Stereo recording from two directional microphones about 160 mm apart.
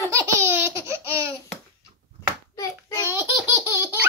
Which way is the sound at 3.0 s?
15° right (ahead or behind).